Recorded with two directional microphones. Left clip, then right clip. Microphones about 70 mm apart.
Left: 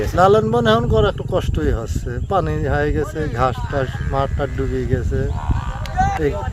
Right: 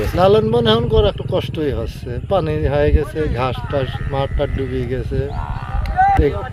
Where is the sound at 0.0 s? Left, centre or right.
Left.